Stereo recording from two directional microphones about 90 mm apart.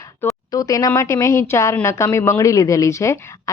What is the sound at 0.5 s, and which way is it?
A woman's voice, 40° left (ahead or behind).